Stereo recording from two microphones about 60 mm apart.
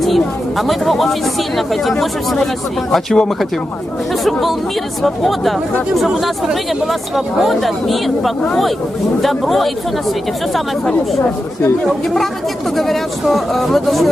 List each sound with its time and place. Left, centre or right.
0.0 s speech: centre